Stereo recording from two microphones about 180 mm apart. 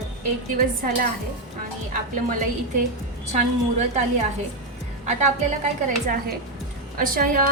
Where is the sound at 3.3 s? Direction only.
45° right (ahead or behind).